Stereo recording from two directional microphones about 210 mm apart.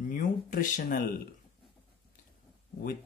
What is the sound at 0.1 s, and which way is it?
Speech, 40° left (ahead or behind).